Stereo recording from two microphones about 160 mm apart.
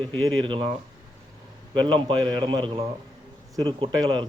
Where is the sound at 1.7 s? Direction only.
30° right (ahead or behind).